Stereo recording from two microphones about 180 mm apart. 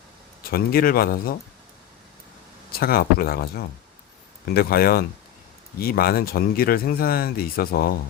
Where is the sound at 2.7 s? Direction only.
55° left (ahead or behind).